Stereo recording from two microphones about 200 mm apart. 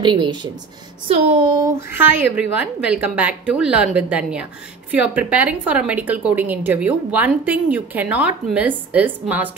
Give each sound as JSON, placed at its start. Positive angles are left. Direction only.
{"t": 0.0, "sound": "a woman's voice", "side_deg": -25}